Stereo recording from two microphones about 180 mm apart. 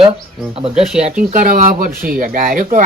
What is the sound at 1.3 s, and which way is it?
A man's voice, 50° right (ahead or behind).